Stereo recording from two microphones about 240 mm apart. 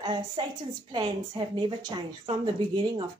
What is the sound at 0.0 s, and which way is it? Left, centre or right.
A woman's voice, centre.